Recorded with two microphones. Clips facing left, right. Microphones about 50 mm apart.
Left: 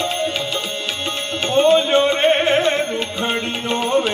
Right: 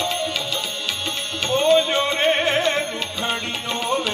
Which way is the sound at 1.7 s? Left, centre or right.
Left.